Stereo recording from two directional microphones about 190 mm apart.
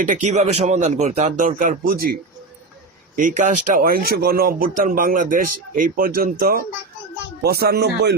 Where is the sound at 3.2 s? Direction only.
45° right (ahead or behind).